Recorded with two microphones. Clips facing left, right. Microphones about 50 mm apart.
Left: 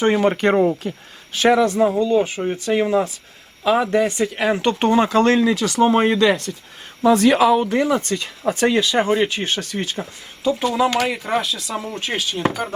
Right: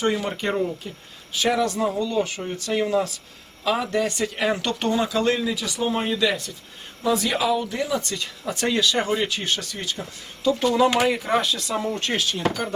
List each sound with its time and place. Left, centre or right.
0.1 s speech: left
0.4 s speech: left
0.7 s speech: left
1.6 s speech: left
4.5 s speech: left
10.4 s speech: centre
10.7 s speech: centre